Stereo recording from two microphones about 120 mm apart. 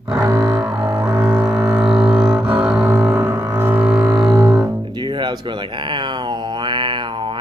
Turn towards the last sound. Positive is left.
turn(degrees=-40)  # may be behind; listen again after turning